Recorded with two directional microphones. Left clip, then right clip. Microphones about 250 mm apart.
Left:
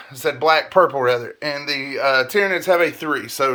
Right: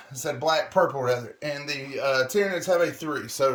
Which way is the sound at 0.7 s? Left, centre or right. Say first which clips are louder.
Left 7 dB; centre.